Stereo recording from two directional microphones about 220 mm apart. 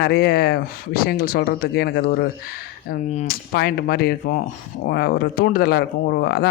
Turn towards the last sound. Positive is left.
turn(degrees=45)  # may be behind; listen again after turning